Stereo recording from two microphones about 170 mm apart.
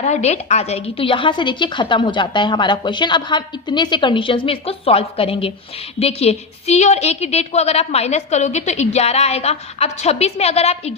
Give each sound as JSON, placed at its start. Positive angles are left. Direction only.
{"t": 0.0, "sound": "a woman's voice", "side_deg": 40}